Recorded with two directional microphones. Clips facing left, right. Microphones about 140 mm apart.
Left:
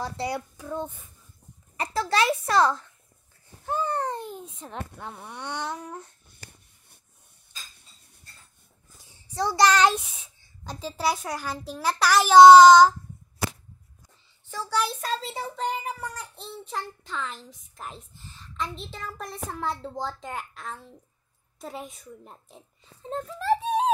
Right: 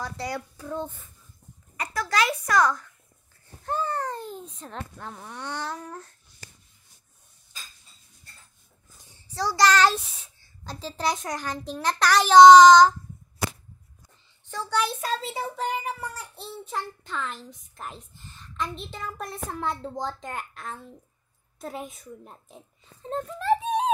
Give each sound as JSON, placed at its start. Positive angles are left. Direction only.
{"t": 0.0, "sound": "a child's voice", "side_deg": 25}
{"t": 0.7, "sound": "a child's voice", "side_deg": 5}
{"t": 1.8, "sound": "a child's voice", "side_deg": 25}
{"t": 3.6, "sound": "a sound", "side_deg": 10}
{"t": 3.9, "sound": "a sound", "side_deg": 25}
{"t": 4.3, "sound": "a child's voice", "side_deg": 10}
{"t": 6.2, "sound": "babbling", "side_deg": 60}
{"t": 8.9, "sound": "a sound", "side_deg": 5}
{"t": 9.3, "sound": "a child's voice", "side_deg": 20}
{"t": 14.5, "sound": "a child's voice", "side_deg": 5}